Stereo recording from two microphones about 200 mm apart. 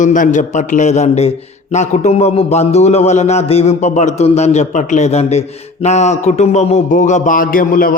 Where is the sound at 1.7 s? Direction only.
35° left (ahead or behind).